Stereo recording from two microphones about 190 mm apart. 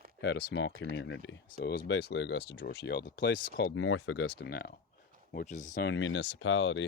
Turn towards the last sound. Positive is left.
turn(degrees=85)